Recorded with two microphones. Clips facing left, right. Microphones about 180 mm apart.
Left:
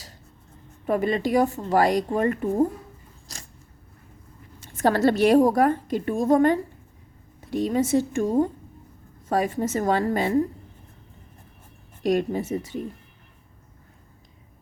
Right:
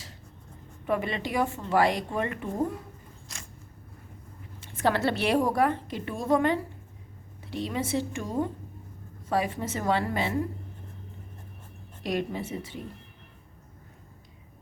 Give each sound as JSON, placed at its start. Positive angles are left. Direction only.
{"t": 0.9, "sound": "a woman's voice", "side_deg": 40}
{"t": 3.3, "sound": "a sound", "side_deg": 35}
{"t": 4.6, "sound": "a woman's voice", "side_deg": 40}
{"t": 12.0, "sound": "a woman's voice", "side_deg": 45}